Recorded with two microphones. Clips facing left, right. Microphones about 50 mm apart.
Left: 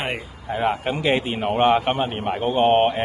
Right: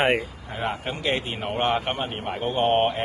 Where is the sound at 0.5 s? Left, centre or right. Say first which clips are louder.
Left 7 dB; centre.